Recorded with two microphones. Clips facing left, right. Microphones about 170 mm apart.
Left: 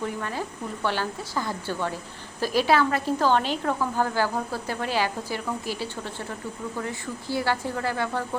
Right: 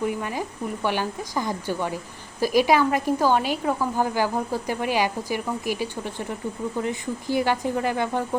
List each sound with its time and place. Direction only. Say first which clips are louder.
0.0 s speech: right 3 dB; 15° right (ahead or behind)